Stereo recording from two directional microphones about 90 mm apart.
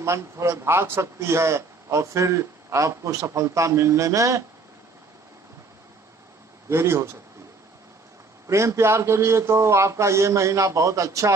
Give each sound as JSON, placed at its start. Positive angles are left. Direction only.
{"t": 0.0, "sound": "a man's voice", "side_deg": -30}
{"t": 6.7, "sound": "speech", "side_deg": -30}
{"t": 8.5, "sound": "a man's voice", "side_deg": -30}